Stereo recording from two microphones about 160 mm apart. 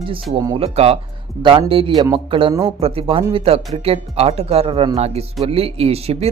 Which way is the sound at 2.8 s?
35° right (ahead or behind).